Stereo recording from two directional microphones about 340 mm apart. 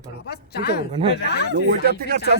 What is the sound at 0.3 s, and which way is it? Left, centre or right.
Speech, left.